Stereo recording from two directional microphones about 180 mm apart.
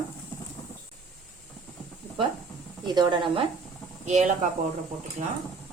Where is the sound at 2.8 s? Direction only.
25° right (ahead or behind).